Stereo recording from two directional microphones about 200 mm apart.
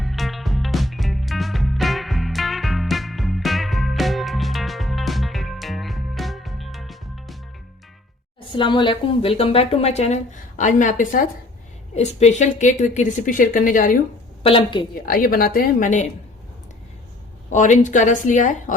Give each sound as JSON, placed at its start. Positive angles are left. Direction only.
{"t": 0.0, "sound": "music", "side_deg": 0}
{"t": 8.5, "sound": "speech", "side_deg": 25}
{"t": 14.4, "sound": "a woman's voice", "side_deg": 25}
{"t": 15.0, "sound": "a woman's voice", "side_deg": 45}
{"t": 17.5, "sound": "speech", "side_deg": 40}